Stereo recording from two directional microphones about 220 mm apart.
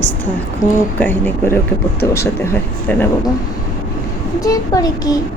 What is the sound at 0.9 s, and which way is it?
Speech, 10° left (ahead or behind).